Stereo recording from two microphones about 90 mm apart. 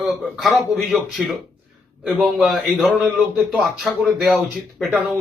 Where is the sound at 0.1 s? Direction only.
Centre (ahead or behind).